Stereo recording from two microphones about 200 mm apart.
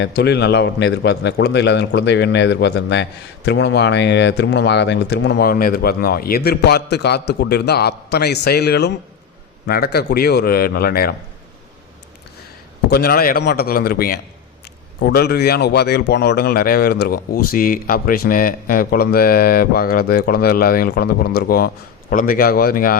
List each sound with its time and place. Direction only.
0.0 s a man's voice: 55° left (ahead or behind)
12.9 s a man's voice: 50° left (ahead or behind)